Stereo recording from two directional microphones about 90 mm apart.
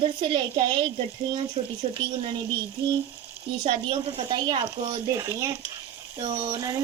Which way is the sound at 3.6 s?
90° right.